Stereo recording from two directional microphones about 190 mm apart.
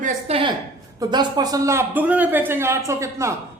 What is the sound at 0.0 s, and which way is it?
A woman's voice, 35° right (ahead or behind).